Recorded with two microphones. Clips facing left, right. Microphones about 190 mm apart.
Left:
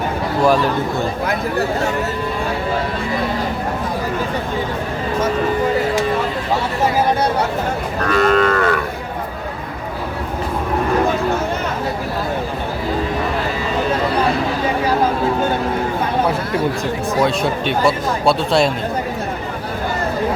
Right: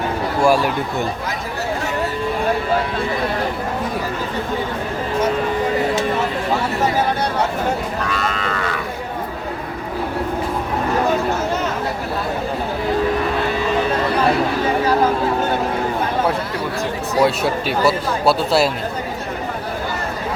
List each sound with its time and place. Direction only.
0.4 s a man's voice: 10° right (ahead or behind)
8.0 s livestock: 50° left (ahead or behind)
17.2 s a man's voice: 5° right (ahead or behind)